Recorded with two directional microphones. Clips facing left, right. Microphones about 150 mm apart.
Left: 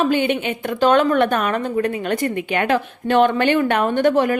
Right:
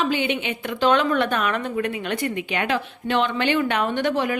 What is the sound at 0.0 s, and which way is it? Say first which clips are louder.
A woman's voice: left 5 dB; 50° left (ahead or behind).